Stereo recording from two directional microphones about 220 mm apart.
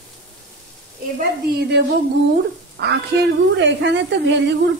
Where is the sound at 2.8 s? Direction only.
50° right (ahead or behind).